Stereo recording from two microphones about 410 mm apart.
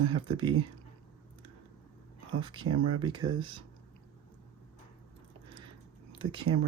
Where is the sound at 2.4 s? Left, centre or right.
Centre.